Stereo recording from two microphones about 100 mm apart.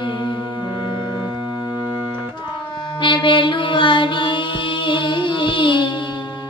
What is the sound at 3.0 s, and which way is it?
Mantra, 55° left (ahead or behind).